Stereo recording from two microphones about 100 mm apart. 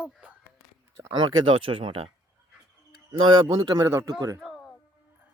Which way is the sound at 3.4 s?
45° right (ahead or behind).